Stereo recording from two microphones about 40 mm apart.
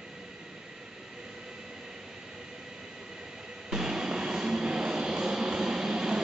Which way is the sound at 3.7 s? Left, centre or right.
Centre.